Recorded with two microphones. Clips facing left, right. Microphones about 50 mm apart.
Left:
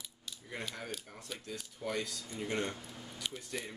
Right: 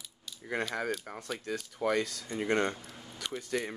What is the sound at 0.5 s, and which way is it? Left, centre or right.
Speech, right.